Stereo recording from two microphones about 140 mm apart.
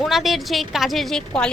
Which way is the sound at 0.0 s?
Centre (ahead or behind).